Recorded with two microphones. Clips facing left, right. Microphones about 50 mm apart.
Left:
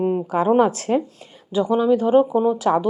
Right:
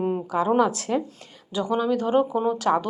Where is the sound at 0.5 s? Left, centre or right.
Left.